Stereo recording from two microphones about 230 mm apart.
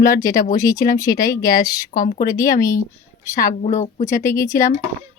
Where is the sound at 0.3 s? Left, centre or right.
Left.